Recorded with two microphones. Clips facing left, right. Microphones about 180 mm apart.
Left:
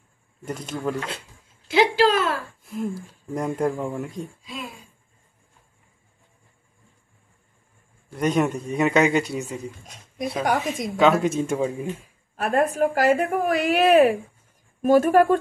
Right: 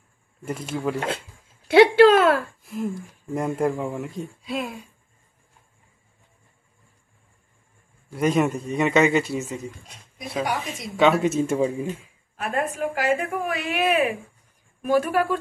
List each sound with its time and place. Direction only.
0.5 s speech: 5° right (ahead or behind)
1.7 s a woman's voice: 60° right (ahead or behind)
2.6 s speech: centre (ahead or behind)
4.5 s speech: 70° right (ahead or behind)
8.1 s speech: 5° right (ahead or behind)
10.4 s a woman's voice: 50° left (ahead or behind)
11.0 s speech: centre (ahead or behind)
12.4 s a woman's voice: 40° left (ahead or behind)